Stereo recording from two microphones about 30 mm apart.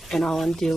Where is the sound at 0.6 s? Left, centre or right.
Centre.